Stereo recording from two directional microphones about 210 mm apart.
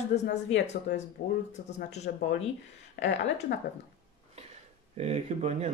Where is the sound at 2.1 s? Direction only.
45° left (ahead or behind).